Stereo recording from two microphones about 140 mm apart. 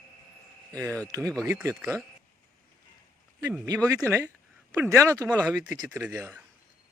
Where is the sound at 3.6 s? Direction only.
25° right (ahead or behind).